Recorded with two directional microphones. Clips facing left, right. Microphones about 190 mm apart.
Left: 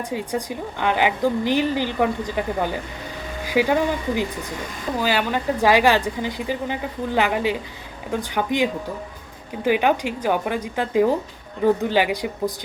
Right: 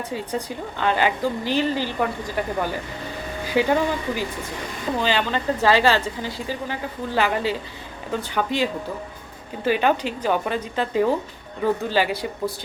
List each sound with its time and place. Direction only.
0.1 s speech: 15° left (ahead or behind)